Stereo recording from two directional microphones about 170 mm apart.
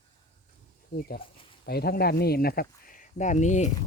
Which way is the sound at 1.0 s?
60° left (ahead or behind).